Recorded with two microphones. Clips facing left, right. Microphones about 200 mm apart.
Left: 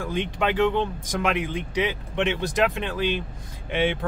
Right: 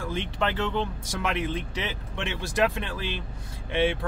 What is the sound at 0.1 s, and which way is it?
Speech, 15° left (ahead or behind).